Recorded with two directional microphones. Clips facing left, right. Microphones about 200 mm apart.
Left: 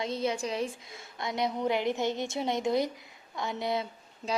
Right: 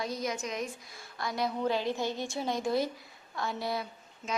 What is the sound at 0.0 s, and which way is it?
A woman's voice, 25° left (ahead or behind).